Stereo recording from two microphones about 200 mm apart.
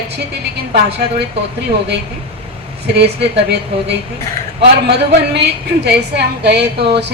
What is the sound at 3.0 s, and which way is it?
A woman's voice, 55° right (ahead or behind).